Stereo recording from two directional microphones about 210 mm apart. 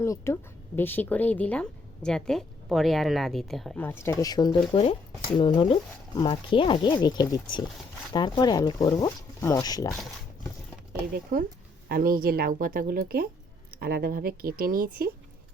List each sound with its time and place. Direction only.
0.0 s speech: 15° left (ahead or behind)
11.1 s speech: 40° right (ahead or behind)